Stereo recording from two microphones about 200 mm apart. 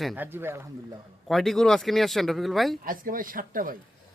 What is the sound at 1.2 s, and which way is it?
Speech, centre (ahead or behind).